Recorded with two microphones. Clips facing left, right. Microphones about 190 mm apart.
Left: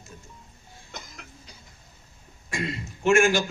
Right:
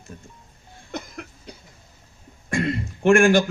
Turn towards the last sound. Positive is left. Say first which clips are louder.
# right 5 dB
turn(degrees=-55)  # may be behind; listen again after turning